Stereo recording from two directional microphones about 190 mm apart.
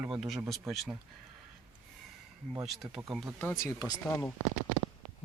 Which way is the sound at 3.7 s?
20° left (ahead or behind).